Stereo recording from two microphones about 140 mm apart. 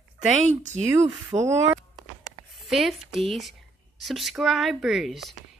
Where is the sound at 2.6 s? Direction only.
Centre (ahead or behind).